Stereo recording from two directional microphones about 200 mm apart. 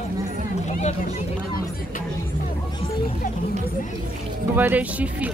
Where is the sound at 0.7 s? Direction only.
35° left (ahead or behind).